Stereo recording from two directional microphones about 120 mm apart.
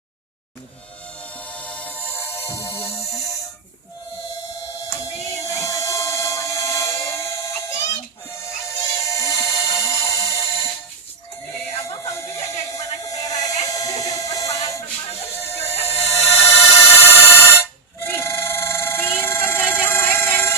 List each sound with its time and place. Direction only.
1.2 s music: 10° left (ahead or behind)
2.8 s music: 55° left (ahead or behind)
4.8 s music: 30° left (ahead or behind)
8.4 s music: 25° left (ahead or behind)
11.8 s music: 25° left (ahead or behind)
15.7 s music: 60° left (ahead or behind)
16.2 s music: 20° left (ahead or behind)